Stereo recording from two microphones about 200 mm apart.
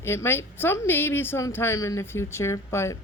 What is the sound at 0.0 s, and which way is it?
Speech, 10° left (ahead or behind).